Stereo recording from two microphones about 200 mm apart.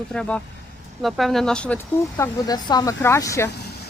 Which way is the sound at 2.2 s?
20° left (ahead or behind).